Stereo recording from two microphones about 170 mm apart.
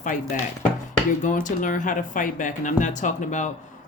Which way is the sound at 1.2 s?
50° left (ahead or behind).